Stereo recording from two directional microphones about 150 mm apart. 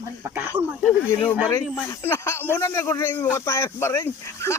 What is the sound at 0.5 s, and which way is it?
Speech, 35° right (ahead or behind).